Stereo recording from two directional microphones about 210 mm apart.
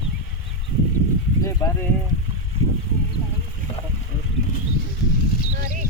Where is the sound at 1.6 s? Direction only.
15° left (ahead or behind).